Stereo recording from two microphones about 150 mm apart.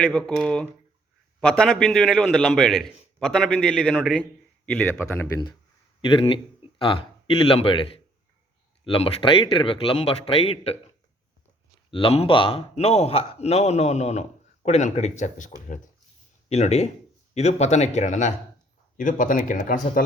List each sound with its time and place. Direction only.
0.0 s a man's voice: 5° left (ahead or behind)
6.1 s speech: 35° left (ahead or behind)
11.9 s a man's voice: 35° left (ahead or behind); by 15.8 s 60° left (ahead or behind)
16.5 s a man's voice: 45° left (ahead or behind); by 20.1 s 60° left (ahead or behind)